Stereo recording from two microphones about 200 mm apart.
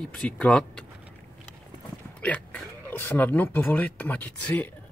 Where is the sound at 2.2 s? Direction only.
5° left (ahead or behind).